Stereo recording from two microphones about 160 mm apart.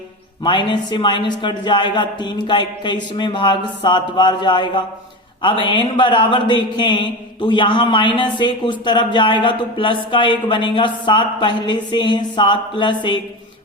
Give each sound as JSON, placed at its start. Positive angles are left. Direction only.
{"t": 0.4, "sound": "speech", "side_deg": 30}